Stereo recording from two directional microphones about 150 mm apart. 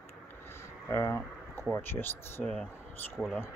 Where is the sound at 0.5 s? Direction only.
15° left (ahead or behind).